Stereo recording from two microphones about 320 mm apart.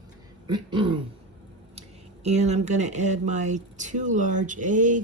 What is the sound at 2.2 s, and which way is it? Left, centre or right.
Speech, right.